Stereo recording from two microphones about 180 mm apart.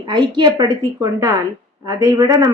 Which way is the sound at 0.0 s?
25° right (ahead or behind).